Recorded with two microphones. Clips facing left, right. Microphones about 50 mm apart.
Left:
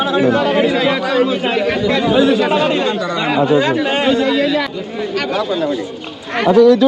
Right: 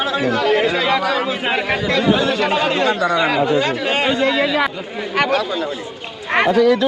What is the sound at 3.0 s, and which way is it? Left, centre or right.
Speech, centre.